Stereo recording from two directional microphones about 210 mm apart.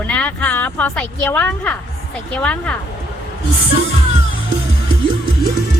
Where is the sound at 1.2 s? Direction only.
10° left (ahead or behind).